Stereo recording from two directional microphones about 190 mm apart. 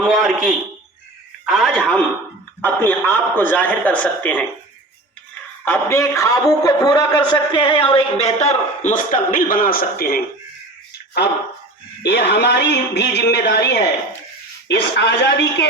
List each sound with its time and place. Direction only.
0.0 s a man's voice: centre (ahead or behind)
5.6 s a man's voice: 15° left (ahead or behind); by 10.2 s 50° left (ahead or behind)
12.0 s a man's voice: 60° left (ahead or behind)